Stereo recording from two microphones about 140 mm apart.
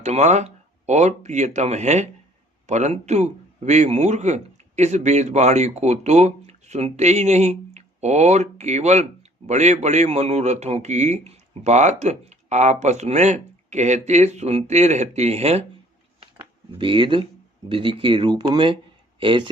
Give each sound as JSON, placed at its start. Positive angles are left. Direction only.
{"t": 0.0, "sound": "a man's voice", "side_deg": -55}
{"t": 16.7, "sound": "speech", "side_deg": -40}